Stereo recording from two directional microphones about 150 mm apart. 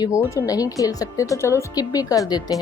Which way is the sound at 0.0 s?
20° left (ahead or behind).